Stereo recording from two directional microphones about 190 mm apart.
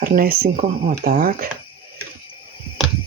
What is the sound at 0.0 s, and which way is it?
Speech, 50° right (ahead or behind).